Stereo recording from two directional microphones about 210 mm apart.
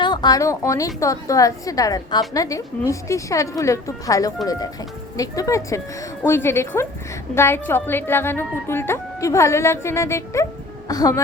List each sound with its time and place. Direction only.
0.0 s a woman's voice: 20° left (ahead or behind)